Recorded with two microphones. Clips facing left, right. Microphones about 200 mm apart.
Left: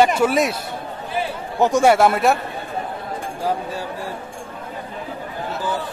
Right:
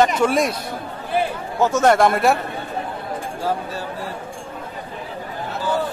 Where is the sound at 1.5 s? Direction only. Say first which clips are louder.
Left 1 dB; 15° left (ahead or behind).